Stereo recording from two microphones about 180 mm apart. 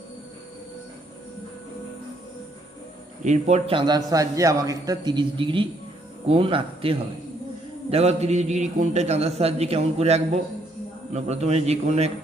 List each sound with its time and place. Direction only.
3.2 s a man's voice: 35° right (ahead or behind)